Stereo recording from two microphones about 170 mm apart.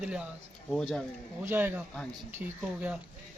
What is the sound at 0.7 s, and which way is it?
Speech, centre (ahead or behind).